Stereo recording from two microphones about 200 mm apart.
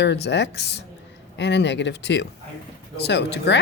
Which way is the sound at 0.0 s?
60° left (ahead or behind).